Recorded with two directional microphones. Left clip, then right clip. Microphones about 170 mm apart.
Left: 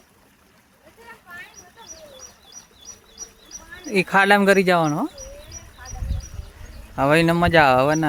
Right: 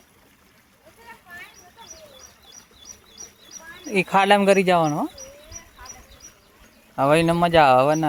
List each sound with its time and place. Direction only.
2.9 s bird: 25° right (ahead or behind)
3.8 s speech: 10° left (ahead or behind)
6.9 s speech: 15° left (ahead or behind)